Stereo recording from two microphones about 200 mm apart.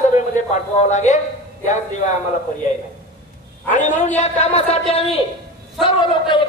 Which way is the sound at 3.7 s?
35° left (ahead or behind).